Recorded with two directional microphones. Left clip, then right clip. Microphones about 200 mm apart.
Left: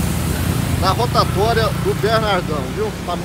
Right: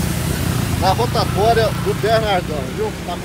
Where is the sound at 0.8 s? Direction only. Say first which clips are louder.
Even; 10° left (ahead or behind).